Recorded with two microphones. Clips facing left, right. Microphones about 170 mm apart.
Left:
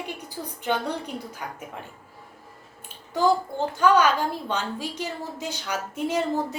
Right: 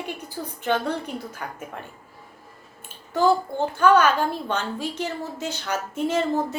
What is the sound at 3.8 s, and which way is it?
A woman's voice, 15° left (ahead or behind).